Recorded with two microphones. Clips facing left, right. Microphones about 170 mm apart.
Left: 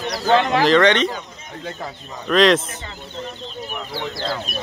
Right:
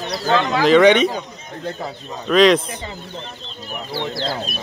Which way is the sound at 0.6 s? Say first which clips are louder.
Right 8 dB; 10° right (ahead or behind).